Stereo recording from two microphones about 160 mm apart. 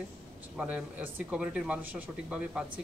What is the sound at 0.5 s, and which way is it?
Speech, 5° right (ahead or behind).